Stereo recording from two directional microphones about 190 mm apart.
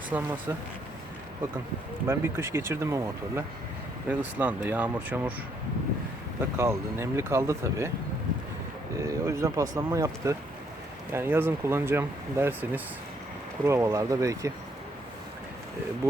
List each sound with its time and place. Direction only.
0.1 s speech: 10° right (ahead or behind)
2.0 s speech: 15° right (ahead or behind)
6.4 s speech: 15° right (ahead or behind)
9.0 s speech: 15° right (ahead or behind)